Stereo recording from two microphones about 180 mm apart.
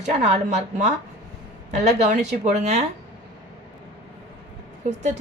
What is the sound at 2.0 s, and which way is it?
Speech, 40° right (ahead or behind).